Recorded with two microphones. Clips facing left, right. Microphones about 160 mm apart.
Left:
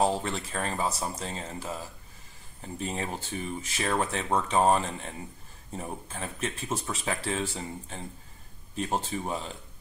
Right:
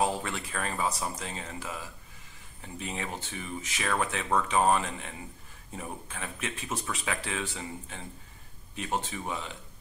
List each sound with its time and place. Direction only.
0.0 s speech: 30° left (ahead or behind)